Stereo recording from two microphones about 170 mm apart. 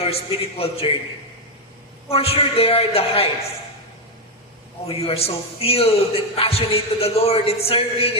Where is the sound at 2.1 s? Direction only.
35° left (ahead or behind).